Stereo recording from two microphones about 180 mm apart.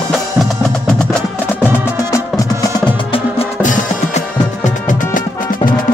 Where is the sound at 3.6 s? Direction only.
45° left (ahead or behind).